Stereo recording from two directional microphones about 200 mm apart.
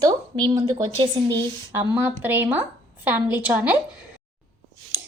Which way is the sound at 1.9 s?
10° right (ahead or behind).